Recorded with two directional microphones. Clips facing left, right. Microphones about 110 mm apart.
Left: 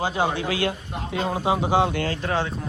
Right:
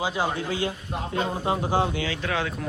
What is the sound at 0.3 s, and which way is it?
Speech, 80° left.